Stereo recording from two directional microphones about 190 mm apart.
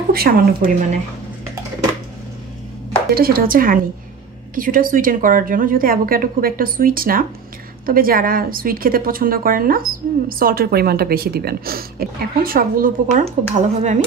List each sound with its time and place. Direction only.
0.1 s speech: 55° right (ahead or behind)
3.2 s speech: 50° right (ahead or behind)